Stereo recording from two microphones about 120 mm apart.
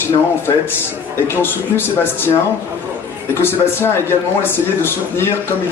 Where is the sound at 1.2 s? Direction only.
20° left (ahead or behind).